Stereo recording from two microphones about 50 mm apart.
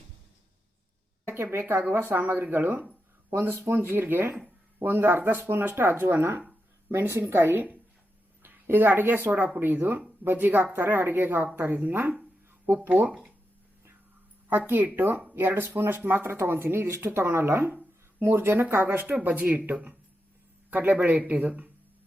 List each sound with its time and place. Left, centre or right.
1.3 s a woman's voice: right
14.9 s speech: right
19.0 s a man's voice: right